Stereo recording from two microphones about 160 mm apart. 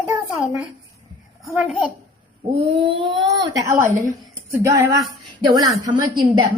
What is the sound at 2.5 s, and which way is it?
Speech, 35° right (ahead or behind).